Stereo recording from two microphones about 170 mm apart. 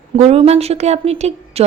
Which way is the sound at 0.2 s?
35° right (ahead or behind).